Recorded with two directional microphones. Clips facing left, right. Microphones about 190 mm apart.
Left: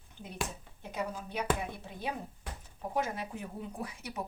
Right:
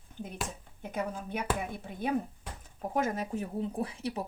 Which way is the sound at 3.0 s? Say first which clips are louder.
Right 4 dB; 45° right (ahead or behind).